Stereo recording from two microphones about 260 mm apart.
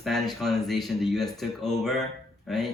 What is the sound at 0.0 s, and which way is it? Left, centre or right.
A woman's voice, centre.